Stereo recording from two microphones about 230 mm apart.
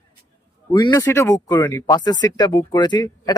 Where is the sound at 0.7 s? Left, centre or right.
Centre.